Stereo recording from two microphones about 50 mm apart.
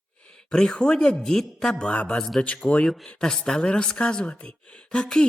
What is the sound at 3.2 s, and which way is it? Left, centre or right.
Speech, centre.